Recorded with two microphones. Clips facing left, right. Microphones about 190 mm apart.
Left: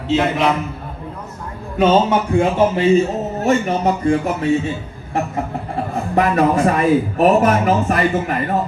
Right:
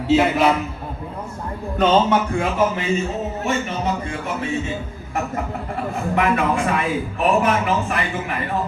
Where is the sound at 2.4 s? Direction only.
30° left (ahead or behind).